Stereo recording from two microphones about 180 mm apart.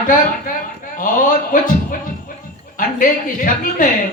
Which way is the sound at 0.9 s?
50° left (ahead or behind).